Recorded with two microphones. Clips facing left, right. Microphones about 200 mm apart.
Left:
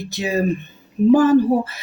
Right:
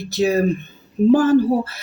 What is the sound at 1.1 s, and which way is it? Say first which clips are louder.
Speech: left 1 dB; 15° left (ahead or behind).